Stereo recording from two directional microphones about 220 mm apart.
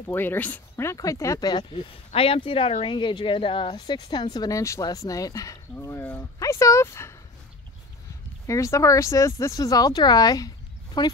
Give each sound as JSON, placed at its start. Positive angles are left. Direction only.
{"t": 0.1, "sound": "speech", "side_deg": 10}
{"t": 8.5, "sound": "speech", "side_deg": 15}